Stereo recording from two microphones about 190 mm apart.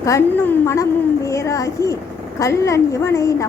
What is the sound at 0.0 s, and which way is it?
A woman's voice, 15° left (ahead or behind).